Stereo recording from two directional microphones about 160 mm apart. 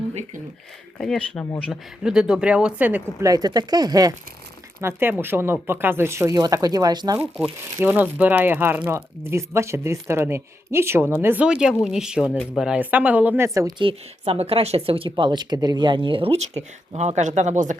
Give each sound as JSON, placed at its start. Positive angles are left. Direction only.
{"t": 0.9, "sound": "speech", "side_deg": 5}
{"t": 3.2, "sound": "speech", "side_deg": -25}
{"t": 7.8, "sound": "speech", "side_deg": -10}